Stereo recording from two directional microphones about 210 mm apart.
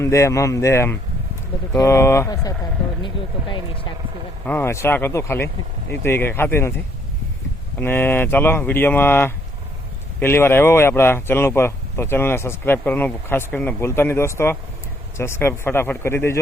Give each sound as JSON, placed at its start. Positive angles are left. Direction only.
{"t": 0.0, "sound": "speech", "side_deg": 15}
{"t": 4.4, "sound": "speech", "side_deg": 10}
{"t": 7.8, "sound": "speech", "side_deg": 10}